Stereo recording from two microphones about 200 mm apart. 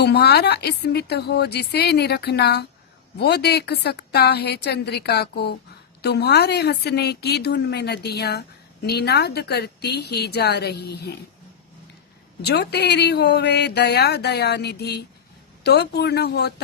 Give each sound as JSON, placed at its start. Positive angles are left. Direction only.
{"t": 0.0, "sound": "a woman's voice", "side_deg": 55}
{"t": 12.4, "sound": "a woman's voice", "side_deg": 55}